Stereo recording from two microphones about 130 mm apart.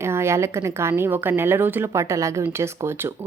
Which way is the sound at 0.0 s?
20° right (ahead or behind).